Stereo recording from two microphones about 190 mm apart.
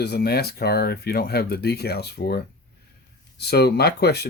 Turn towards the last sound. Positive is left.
turn(degrees=60)  # may be behind; listen again after turning